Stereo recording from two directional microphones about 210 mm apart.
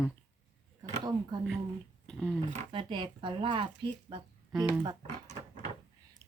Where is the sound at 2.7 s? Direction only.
25° right (ahead or behind).